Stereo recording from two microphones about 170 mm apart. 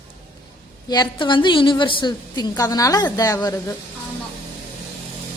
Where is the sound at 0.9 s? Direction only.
25° left (ahead or behind).